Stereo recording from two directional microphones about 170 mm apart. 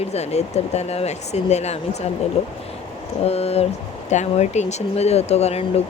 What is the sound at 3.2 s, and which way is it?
Speech, 35° left (ahead or behind).